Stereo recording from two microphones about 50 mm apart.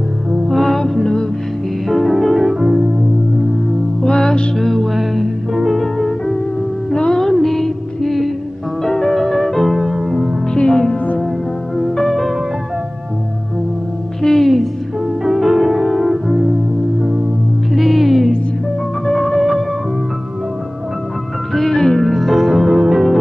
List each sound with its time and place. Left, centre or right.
0.5 s music: centre
4.0 s music: centre
4.6 s music: centre
5.8 s music: centre
10.5 s music: centre
11.2 s music: centre
14.2 s music: centre
15.0 s music: centre
17.7 s music: centre
21.5 s music: centre